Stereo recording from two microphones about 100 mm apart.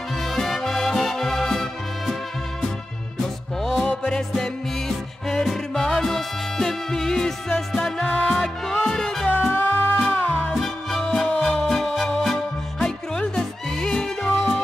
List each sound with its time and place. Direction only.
0.2 s music: 5° left (ahead or behind)
3.6 s music: 5° left (ahead or behind)
9.3 s music: 15° left (ahead or behind)
10.5 s music: centre (ahead or behind)